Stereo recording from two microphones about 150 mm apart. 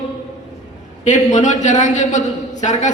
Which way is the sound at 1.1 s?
55° left (ahead or behind).